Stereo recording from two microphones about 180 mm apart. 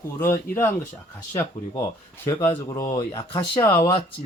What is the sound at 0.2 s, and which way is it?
Speech, 15° left (ahead or behind).